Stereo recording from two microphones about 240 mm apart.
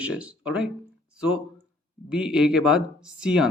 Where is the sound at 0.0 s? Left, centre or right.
Centre.